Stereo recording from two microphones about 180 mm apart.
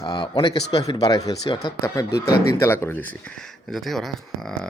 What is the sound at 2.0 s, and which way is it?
Speech, 60° left (ahead or behind).